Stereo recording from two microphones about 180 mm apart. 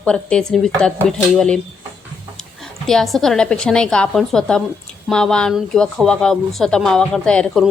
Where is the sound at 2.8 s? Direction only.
Centre (ahead or behind).